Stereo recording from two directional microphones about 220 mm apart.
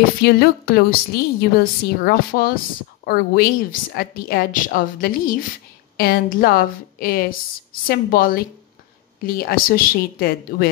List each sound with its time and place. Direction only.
0.2 s a woman's voice: 45° left (ahead or behind)